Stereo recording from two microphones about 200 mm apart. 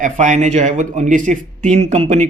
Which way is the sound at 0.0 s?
35° right (ahead or behind).